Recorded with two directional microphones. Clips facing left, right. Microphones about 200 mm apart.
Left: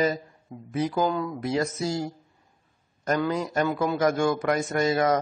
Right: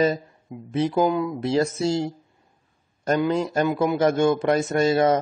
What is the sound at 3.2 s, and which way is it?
A man's voice, 25° right (ahead or behind).